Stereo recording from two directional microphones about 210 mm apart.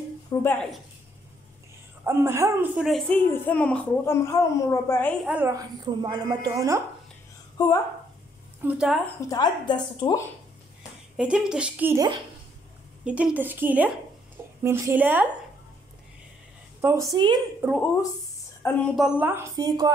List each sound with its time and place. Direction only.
0.3 s speech: 10° left (ahead or behind)
2.0 s a woman's voice: 10° right (ahead or behind); by 5.1 s 10° left (ahead or behind)
5.2 s a woman's voice: 5° right (ahead or behind)
5.9 s a woman's voice: 20° right (ahead or behind)
7.6 s a woman's voice: 20° left (ahead or behind)
8.6 s speech: 5° right (ahead or behind)
9.3 s a woman's voice: 20° left (ahead or behind)
11.1 s a woman's voice: 5° right (ahead or behind)
17.1 s a woman's voice: 20° right (ahead or behind)
18.6 s a woman's voice: 10° left (ahead or behind)
18.9 s a woman's voice: 5° right (ahead or behind)